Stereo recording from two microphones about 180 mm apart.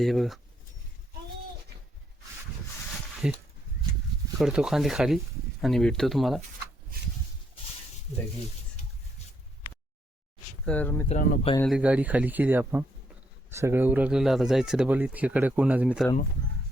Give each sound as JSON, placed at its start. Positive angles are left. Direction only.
{"t": 0.0, "sound": "speech", "side_deg": 0}
{"t": 2.9, "sound": "a sound", "side_deg": 0}
{"t": 4.4, "sound": "speech", "side_deg": -5}
{"t": 10.7, "sound": "speech", "side_deg": 10}
{"t": 11.1, "sound": "speech", "side_deg": 45}
{"t": 11.6, "sound": "speech", "side_deg": -5}